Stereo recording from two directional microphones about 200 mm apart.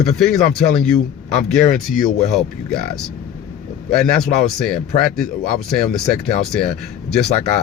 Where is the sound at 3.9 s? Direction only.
Centre (ahead or behind).